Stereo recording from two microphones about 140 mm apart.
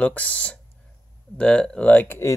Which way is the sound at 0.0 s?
10° left (ahead or behind).